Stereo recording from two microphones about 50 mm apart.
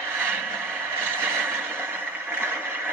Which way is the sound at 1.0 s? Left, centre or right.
Right.